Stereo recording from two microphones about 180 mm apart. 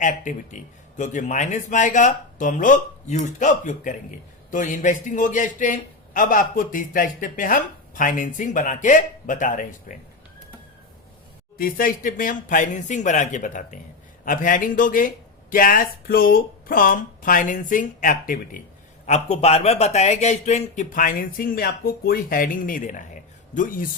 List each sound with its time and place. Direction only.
0.0 s a man's voice: 45° left (ahead or behind)
11.5 s a man's voice: 50° left (ahead or behind)
19.0 s a man's voice: 40° left (ahead or behind)